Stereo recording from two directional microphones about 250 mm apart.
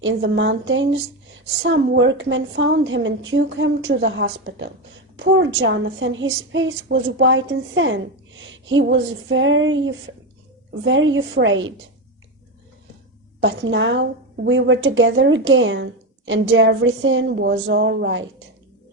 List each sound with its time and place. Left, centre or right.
0.0 s a woman's voice: right
13.4 s a woman's voice: right